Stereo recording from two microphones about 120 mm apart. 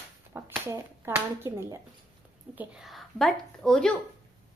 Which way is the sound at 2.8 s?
Centre (ahead or behind).